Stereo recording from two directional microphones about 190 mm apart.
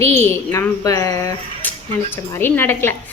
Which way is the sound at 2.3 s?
10° left (ahead or behind).